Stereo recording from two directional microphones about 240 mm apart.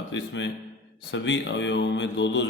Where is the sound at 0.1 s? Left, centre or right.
Left.